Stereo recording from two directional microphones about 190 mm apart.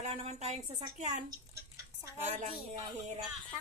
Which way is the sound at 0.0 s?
35° right (ahead or behind).